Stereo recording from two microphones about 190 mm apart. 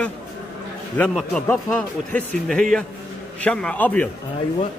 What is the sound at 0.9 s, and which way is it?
A man's voice, 5° left (ahead or behind).